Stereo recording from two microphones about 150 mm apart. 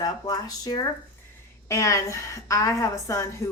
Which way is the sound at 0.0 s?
25° left (ahead or behind).